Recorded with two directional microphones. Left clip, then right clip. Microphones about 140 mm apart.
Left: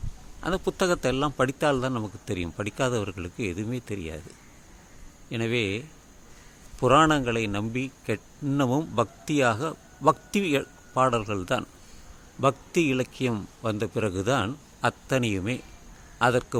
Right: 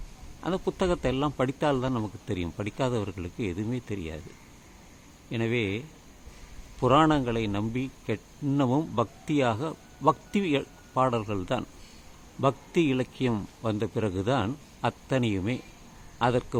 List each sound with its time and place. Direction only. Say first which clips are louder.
0.4 s a man's voice: left 2 dB; 20° left (ahead or behind)
5.3 s a man's voice: left 2 dB; 20° left (ahead or behind)